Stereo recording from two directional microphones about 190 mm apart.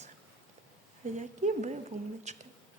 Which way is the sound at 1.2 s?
40° right (ahead or behind).